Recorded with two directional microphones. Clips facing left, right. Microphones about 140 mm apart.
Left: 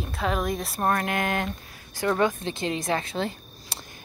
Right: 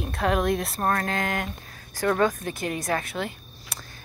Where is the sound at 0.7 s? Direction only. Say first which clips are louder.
Left 1 dB; 20° left (ahead or behind).